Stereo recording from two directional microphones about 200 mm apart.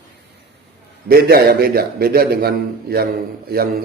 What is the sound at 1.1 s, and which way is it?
A man's voice, 50° right (ahead or behind).